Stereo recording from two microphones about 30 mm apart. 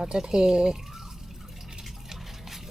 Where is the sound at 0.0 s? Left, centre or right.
Right.